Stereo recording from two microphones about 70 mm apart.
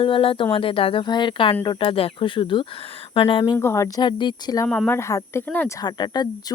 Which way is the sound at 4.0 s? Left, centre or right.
Left.